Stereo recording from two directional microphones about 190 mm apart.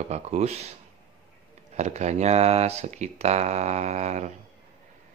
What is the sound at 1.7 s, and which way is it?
Speech, 35° right (ahead or behind).